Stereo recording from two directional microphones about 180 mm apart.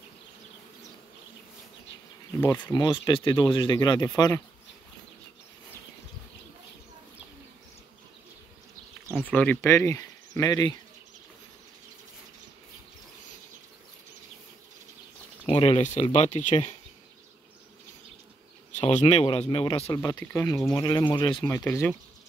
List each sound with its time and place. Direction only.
2.4 s speech: 10° left (ahead or behind)
2.7 s speech: 25° left (ahead or behind)
9.3 s speech: 10° left (ahead or behind)
15.4 s speech: 35° left (ahead or behind)
18.8 s speech: 40° left (ahead or behind)
20.0 s speech: 20° left (ahead or behind)
21.5 s speech: 15° left (ahead or behind)